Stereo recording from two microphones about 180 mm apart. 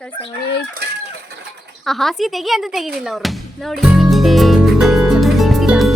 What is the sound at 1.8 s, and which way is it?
Music, centre (ahead or behind).